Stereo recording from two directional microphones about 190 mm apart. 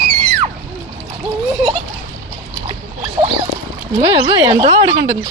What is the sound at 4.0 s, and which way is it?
Speech, 30° right (ahead or behind).